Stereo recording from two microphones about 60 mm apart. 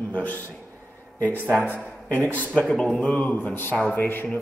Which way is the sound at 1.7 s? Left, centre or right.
Left.